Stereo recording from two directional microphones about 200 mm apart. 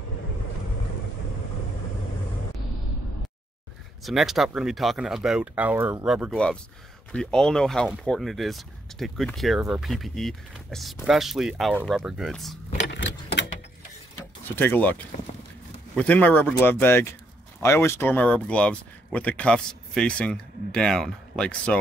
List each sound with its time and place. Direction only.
4.0 s speech: centre (ahead or behind)
12.8 s vehicle: 60° left (ahead or behind)
14.5 s speech: 10° left (ahead or behind)